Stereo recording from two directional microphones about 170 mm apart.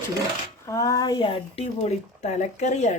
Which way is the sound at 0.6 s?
20° left (ahead or behind).